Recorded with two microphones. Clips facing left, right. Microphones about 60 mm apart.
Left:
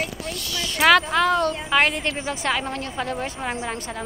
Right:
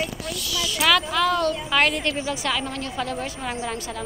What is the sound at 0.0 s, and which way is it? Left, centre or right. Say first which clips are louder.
Speech: even; left.